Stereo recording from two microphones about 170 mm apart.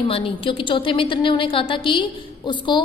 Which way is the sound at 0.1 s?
30° left (ahead or behind).